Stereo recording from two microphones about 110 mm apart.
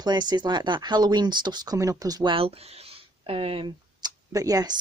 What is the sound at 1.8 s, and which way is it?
Speech, 30° right (ahead or behind).